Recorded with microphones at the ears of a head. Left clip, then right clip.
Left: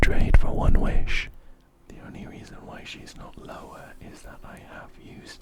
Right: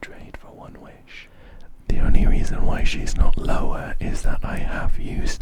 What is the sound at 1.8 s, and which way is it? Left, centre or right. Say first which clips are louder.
Speech: right 14 dB; right.